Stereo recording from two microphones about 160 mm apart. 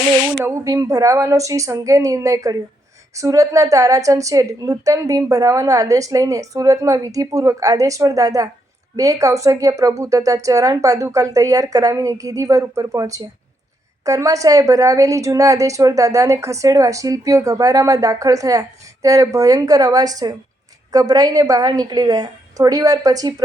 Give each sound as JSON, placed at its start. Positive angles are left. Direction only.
{"t": 0.4, "sound": "a woman's voice", "side_deg": -20}